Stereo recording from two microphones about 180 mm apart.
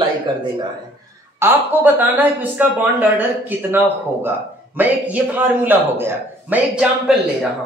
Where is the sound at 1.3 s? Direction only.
10° right (ahead or behind).